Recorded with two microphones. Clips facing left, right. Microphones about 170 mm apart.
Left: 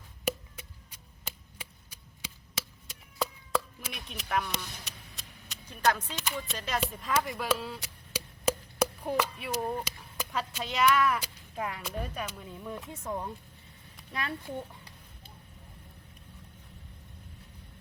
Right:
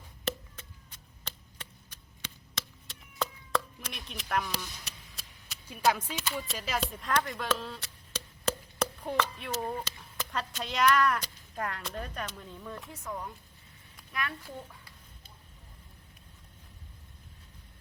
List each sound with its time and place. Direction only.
0.3 s chop: 10° left (ahead or behind)
4.9 s a sound: centre (ahead or behind)
6.5 s speech: centre (ahead or behind)
12.9 s speech: 25° left (ahead or behind)